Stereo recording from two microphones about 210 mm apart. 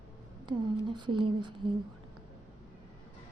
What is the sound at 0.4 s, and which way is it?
Speech, 20° right (ahead or behind).